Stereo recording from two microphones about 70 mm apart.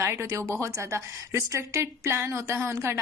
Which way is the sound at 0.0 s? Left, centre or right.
Right.